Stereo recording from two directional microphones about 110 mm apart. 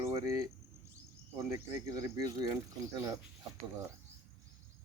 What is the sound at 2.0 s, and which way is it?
Speech, 35° right (ahead or behind).